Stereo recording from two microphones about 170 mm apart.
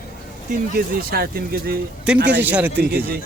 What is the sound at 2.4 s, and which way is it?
Speech, 10° right (ahead or behind).